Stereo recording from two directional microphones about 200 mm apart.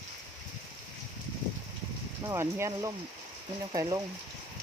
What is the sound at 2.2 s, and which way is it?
Speech, 15° right (ahead or behind).